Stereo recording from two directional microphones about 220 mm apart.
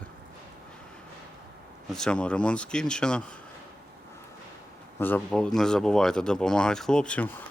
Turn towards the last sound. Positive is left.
turn(degrees=5)  # may be behind; listen again after turning